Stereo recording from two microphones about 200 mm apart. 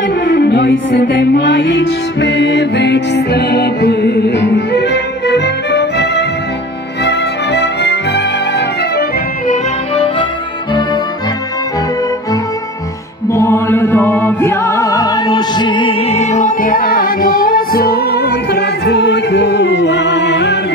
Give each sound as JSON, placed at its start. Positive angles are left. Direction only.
{"t": 0.3, "sound": "music", "side_deg": 60}
{"t": 9.5, "sound": "music", "side_deg": 30}
{"t": 13.3, "sound": "music", "side_deg": 10}